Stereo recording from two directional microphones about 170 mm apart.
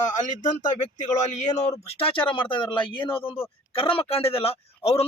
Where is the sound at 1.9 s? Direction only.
35° left (ahead or behind).